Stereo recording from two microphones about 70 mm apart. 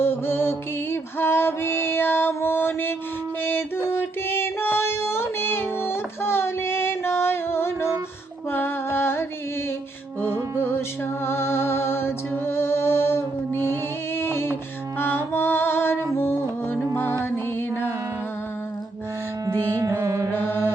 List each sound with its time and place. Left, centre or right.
0.0 s music: left
10.6 s music: left
19.7 s music: right
20.3 s music: left